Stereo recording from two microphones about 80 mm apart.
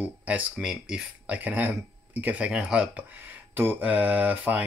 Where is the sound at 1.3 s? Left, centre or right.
Centre.